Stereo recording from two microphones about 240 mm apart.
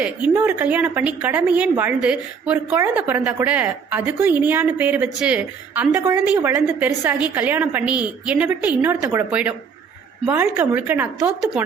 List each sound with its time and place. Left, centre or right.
0.0 s a woman's voice: centre